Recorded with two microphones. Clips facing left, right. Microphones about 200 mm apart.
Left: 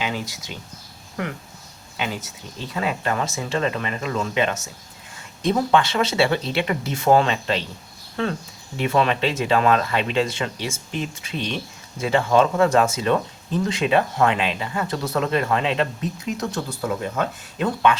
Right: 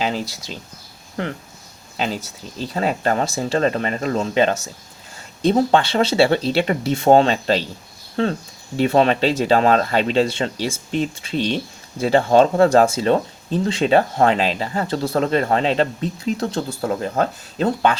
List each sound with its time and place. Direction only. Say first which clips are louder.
0.0 s speech: right 4 dB; 35° right (ahead or behind)
2.0 s speech: right 4 dB; 35° right (ahead or behind)